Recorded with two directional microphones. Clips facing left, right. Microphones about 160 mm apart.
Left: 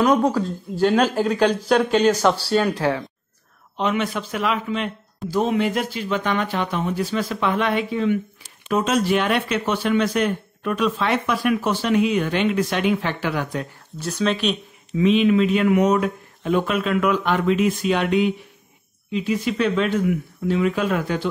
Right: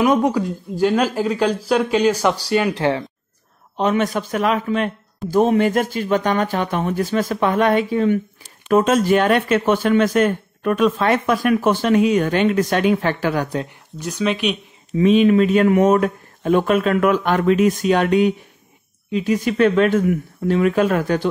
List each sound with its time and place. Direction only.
0.0 s speech: 20° right (ahead or behind)
3.7 s speech: 40° right (ahead or behind)
13.9 s speech: 15° right (ahead or behind)
15.0 s speech: 45° right (ahead or behind)